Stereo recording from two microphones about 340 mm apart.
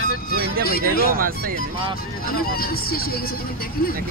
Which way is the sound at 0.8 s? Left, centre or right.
Right.